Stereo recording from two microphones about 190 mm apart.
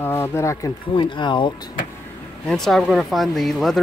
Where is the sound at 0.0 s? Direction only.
10° left (ahead or behind).